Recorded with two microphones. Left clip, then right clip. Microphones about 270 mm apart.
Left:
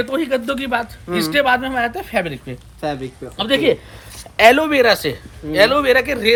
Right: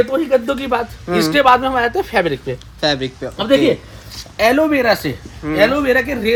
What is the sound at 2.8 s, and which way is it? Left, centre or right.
Speech, centre.